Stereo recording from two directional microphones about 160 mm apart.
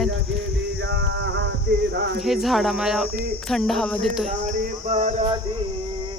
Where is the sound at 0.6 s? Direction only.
90° right.